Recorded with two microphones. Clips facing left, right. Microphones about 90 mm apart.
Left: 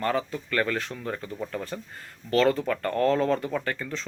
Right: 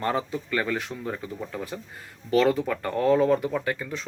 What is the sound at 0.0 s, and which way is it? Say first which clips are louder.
Speech: even; 20° right (ahead or behind).